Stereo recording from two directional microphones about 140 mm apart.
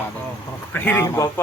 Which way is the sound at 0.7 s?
15° left (ahead or behind).